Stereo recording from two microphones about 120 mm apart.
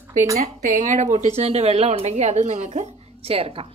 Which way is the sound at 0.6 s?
90° right.